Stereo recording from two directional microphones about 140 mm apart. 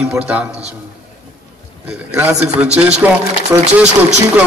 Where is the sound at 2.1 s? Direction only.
15° right (ahead or behind).